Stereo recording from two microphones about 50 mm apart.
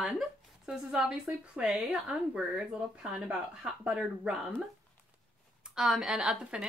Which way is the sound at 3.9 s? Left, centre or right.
Right.